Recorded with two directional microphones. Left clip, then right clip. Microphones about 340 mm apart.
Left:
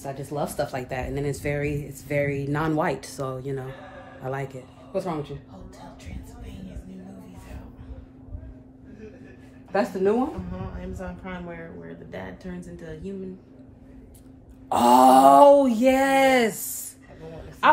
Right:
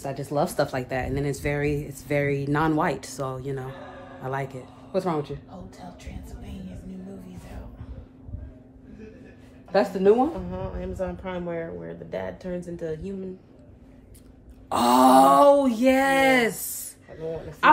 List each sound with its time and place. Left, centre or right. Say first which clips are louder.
0.0 s speech: right 4 dB; centre
9.7 s speech: right 3 dB; centre
10.8 s speech: right 6 dB; right
14.7 s speech: left 2 dB; centre